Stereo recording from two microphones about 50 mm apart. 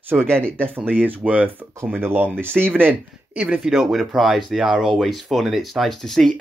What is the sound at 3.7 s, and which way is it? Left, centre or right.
Speech, centre.